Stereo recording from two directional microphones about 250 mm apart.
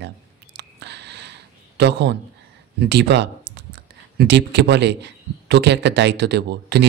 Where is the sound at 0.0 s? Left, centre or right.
Right.